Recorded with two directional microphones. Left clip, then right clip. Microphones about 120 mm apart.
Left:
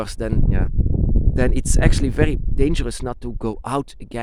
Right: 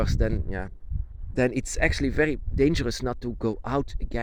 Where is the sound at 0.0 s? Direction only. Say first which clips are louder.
Left 3 dB; 35° left (ahead or behind).